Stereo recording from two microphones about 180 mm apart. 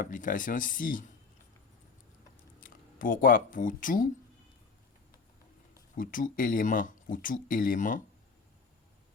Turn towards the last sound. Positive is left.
turn(degrees=45)  # may be behind; listen again after turning